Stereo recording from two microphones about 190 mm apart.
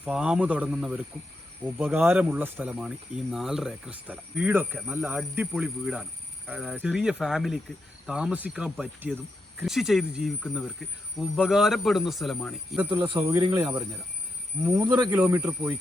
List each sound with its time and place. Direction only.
0.0 s speech: 5° right (ahead or behind)
12.9 s speech: 25° right (ahead or behind)
13.1 s speech: 15° right (ahead or behind)
13.4 s speech: 25° right (ahead or behind)
14.6 s speech: 15° right (ahead or behind)